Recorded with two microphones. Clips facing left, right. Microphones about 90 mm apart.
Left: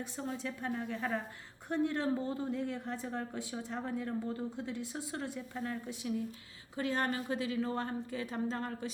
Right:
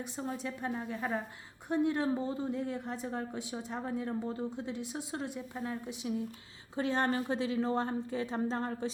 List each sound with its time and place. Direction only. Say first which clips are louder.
0.0 s a woman's voice: right 1 dB; 15° right (ahead or behind)